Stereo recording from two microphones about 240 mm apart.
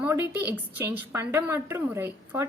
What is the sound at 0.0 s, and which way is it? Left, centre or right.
A woman's voice, centre.